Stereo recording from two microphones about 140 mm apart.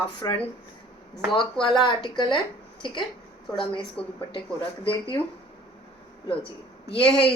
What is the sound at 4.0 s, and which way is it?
Speech, 5° left (ahead or behind).